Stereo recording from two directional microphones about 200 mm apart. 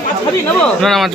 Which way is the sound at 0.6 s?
Centre (ahead or behind).